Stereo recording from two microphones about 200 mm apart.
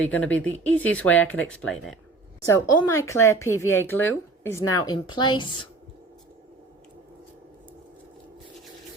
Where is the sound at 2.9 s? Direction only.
15° left (ahead or behind).